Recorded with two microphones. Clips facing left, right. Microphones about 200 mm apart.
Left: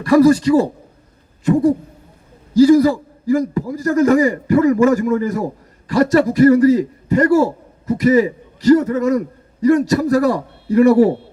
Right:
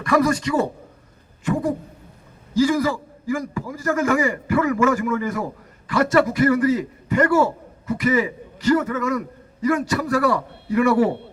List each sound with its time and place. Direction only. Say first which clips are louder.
0.0 s a man's voice: left 8 dB; 35° left (ahead or behind)
2.6 s a man's voice: left 9 dB; 35° left (ahead or behind)